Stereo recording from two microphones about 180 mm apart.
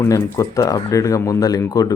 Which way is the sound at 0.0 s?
15° left (ahead or behind).